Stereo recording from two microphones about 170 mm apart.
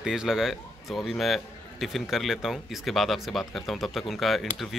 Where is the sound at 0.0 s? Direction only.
5° right (ahead or behind).